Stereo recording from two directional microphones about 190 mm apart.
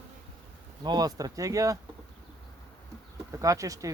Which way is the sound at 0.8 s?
20° right (ahead or behind).